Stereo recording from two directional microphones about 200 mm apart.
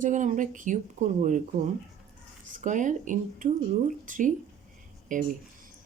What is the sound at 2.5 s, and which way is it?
A woman's voice, 40° right (ahead or behind).